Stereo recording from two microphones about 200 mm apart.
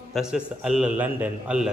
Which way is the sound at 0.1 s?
5° right (ahead or behind).